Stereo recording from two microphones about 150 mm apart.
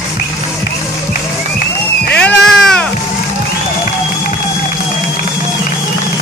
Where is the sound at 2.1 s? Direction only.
5° left (ahead or behind).